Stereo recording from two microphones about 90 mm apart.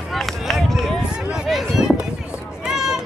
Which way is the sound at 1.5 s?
Centre (ahead or behind).